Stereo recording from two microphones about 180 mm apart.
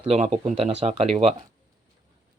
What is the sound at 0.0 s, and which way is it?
Speech, 35° right (ahead or behind).